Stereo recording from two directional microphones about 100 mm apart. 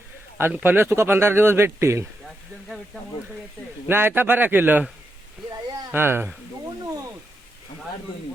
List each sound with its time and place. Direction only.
0.3 s speech: 20° right (ahead or behind)
2.2 s speech: centre (ahead or behind)
3.8 s speech: 20° right (ahead or behind)
5.9 s speech: 25° right (ahead or behind)